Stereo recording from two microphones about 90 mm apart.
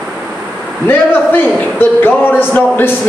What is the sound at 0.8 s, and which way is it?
A man's voice, 20° left (ahead or behind).